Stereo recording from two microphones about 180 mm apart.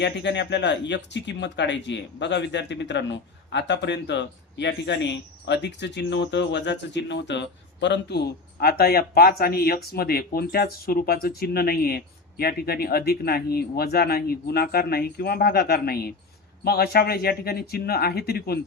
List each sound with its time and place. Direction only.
0.0 s speech: 75° left (ahead or behind)